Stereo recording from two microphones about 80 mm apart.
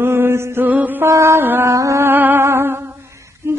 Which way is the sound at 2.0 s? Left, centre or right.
Right.